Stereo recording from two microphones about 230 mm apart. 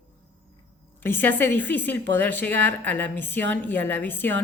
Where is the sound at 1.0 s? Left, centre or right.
Centre.